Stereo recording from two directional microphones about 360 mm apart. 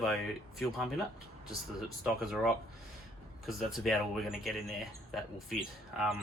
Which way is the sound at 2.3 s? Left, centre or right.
Centre.